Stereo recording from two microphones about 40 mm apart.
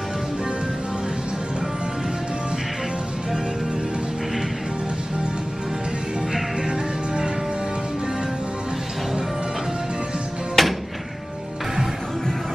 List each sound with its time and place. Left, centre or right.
6.6 s music: centre
10.6 s music: centre